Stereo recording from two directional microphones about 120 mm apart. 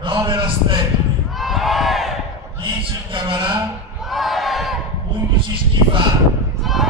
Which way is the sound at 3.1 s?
45° right (ahead or behind).